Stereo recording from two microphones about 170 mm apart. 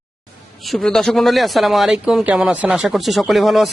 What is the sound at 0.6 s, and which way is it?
A man's voice, centre (ahead or behind).